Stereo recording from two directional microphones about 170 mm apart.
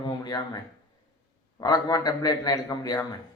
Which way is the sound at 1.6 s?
20° left (ahead or behind).